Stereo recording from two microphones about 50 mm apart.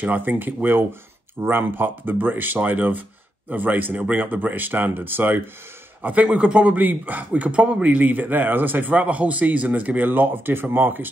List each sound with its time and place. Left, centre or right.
0.0 s a man's voice: right
6.0 s a man's voice: right